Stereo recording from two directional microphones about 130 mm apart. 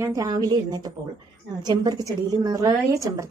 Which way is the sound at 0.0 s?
25° right (ahead or behind).